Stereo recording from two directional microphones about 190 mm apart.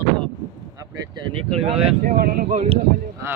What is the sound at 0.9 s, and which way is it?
Speech, 20° right (ahead or behind).